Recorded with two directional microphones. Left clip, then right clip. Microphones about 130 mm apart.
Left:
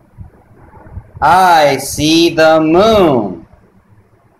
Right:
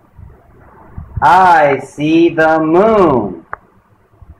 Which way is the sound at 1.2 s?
15° left (ahead or behind).